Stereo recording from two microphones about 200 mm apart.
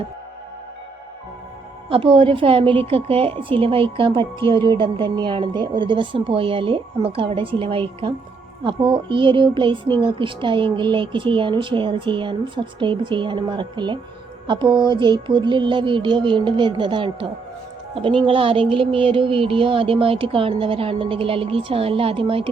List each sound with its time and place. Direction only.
1.9 s a woman's voice: 25° right (ahead or behind)